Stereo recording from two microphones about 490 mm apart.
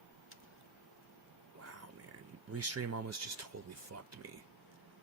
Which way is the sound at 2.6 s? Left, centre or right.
Right.